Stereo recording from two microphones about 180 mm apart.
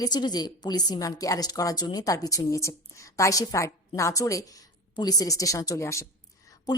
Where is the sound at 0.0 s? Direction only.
25° left (ahead or behind).